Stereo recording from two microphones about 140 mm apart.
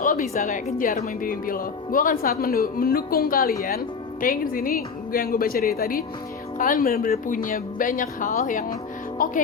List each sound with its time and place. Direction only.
0.0 s speech: 75° left (ahead or behind)